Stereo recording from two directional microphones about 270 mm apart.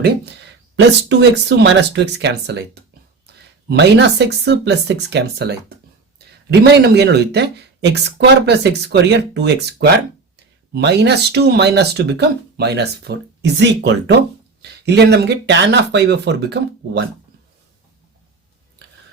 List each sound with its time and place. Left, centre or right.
0.8 s speech: right
3.7 s speech: right